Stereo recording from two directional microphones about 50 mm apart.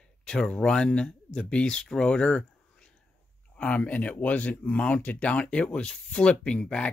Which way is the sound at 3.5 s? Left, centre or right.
Left.